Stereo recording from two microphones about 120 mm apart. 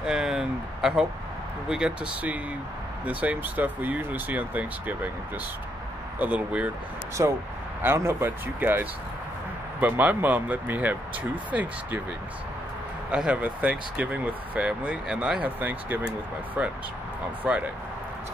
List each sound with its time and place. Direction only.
0.0 s a sound: 5° right (ahead or behind)
1.7 s speech: 5° right (ahead or behind)
6.1 s speech: 15° right (ahead or behind)
7.2 s speech: 25° right (ahead or behind)
13.1 s speech: 10° right (ahead or behind)